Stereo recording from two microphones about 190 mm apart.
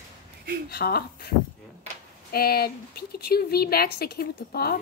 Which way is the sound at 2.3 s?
55° left (ahead or behind).